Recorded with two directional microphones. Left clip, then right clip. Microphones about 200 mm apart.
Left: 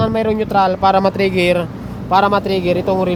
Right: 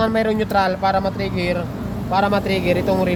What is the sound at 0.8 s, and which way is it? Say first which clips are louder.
Speech: left 6 dB; 35° left (ahead or behind).